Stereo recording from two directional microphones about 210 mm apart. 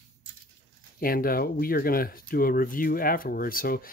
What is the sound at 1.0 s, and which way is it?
Speech, 45° left (ahead or behind).